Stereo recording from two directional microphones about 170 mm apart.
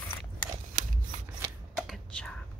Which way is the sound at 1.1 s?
50° right (ahead or behind).